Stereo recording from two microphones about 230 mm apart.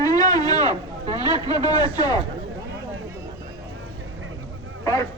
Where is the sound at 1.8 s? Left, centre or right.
Centre.